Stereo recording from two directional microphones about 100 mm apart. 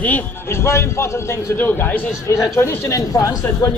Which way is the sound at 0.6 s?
25° left (ahead or behind).